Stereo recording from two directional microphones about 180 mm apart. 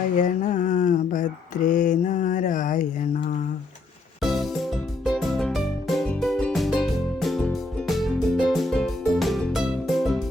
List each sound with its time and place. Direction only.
0.2 s mantra: 45° left (ahead or behind)
4.2 s music: centre (ahead or behind)